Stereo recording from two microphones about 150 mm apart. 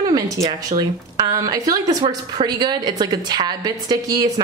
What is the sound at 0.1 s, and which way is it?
A woman's voice, 25° right (ahead or behind).